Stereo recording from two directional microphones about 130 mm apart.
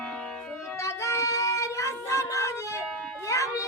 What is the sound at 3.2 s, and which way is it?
Music, 25° left (ahead or behind).